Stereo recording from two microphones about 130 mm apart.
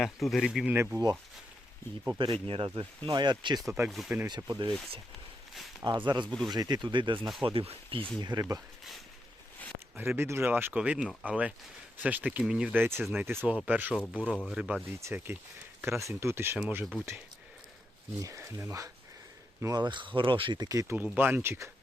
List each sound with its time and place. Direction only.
0.0 s speech: centre (ahead or behind)
0.7 s speech: 15° right (ahead or behind)
2.0 s speech: 35° right (ahead or behind)
3.8 s speech: centre (ahead or behind)
4.4 s speech: 35° right (ahead or behind)
5.8 s speech: 35° right (ahead or behind)
8.2 s speech: 30° right (ahead or behind)
9.9 s speech: 15° right (ahead or behind)
13.9 s speech: 10° left (ahead or behind)
14.4 s speech: 5° right (ahead or behind)
18.2 s speech: 25° right (ahead or behind)
20.9 s speech: 15° right (ahead or behind)